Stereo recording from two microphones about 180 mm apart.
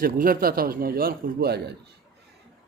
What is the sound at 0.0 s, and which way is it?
A man's voice, 55° right (ahead or behind).